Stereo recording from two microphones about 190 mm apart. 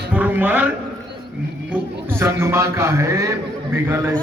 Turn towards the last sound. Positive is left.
turn(degrees=-10)  # may be behind; listen again after turning